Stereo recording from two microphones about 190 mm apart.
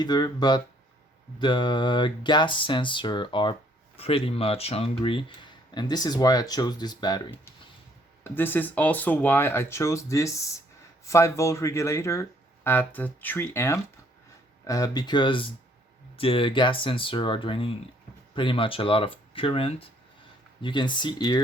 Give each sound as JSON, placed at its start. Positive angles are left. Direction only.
{"t": 0.0, "sound": "speech", "side_deg": 20}
{"t": 8.2, "sound": "speech", "side_deg": 10}